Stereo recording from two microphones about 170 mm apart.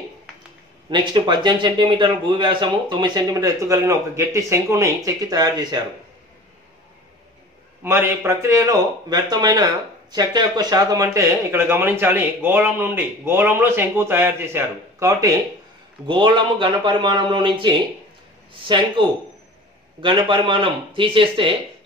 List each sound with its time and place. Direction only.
0.8 s a man's voice: 25° right (ahead or behind)
7.8 s a man's voice: 15° right (ahead or behind)
16.1 s a man's voice: 30° right (ahead or behind)
20.0 s a man's voice: 30° right (ahead or behind)